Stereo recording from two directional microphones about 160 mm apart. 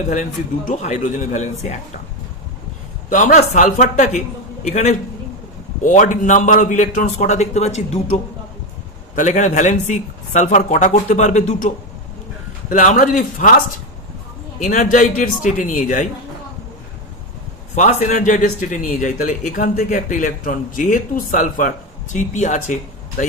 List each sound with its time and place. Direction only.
0.7 s speech: 50° left (ahead or behind)
3.1 s speech: 50° left (ahead or behind)
14.6 s speech: 50° left (ahead or behind)
17.7 s speech: 50° left (ahead or behind)